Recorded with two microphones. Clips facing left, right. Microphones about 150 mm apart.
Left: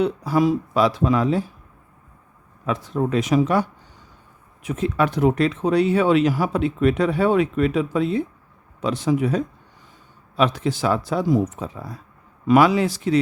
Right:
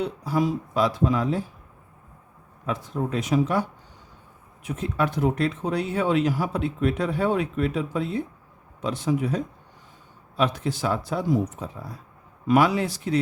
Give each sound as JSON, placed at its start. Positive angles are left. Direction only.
{"t": 0.0, "sound": "speech", "side_deg": 80}
{"t": 2.6, "sound": "speech", "side_deg": 80}